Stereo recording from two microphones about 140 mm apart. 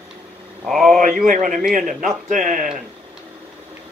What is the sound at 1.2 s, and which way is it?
Speech, 70° right (ahead or behind).